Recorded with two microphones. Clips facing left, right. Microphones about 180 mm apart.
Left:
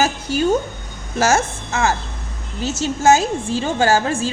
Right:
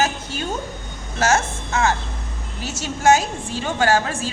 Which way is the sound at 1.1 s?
25° left (ahead or behind).